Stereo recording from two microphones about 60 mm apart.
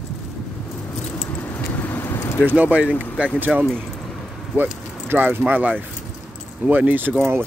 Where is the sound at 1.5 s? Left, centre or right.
Left.